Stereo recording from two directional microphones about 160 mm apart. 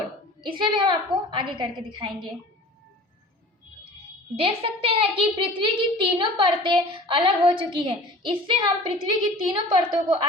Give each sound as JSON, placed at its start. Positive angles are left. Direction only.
{"t": 0.4, "sound": "a woman's voice", "side_deg": -30}
{"t": 4.4, "sound": "a woman's voice", "side_deg": -35}